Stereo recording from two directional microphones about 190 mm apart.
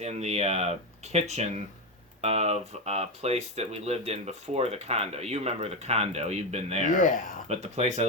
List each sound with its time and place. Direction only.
0.0 s speech: 35° right (ahead or behind)
6.8 s speech: 45° left (ahead or behind)
7.4 s speech: 35° right (ahead or behind)